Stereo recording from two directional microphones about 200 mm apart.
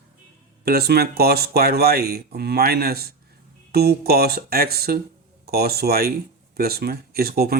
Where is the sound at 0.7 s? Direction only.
50° right (ahead or behind).